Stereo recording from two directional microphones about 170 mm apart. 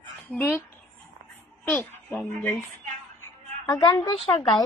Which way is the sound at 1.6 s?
5° left (ahead or behind).